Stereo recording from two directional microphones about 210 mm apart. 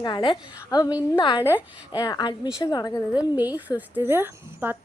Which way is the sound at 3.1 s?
10° right (ahead or behind).